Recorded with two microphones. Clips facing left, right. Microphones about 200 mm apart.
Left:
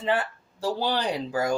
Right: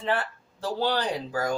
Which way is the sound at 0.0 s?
20° left (ahead or behind).